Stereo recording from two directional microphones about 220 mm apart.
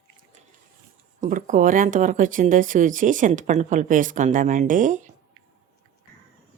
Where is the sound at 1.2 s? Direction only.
35° right (ahead or behind).